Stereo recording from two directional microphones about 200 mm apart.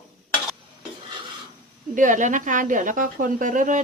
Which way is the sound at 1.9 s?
40° right (ahead or behind).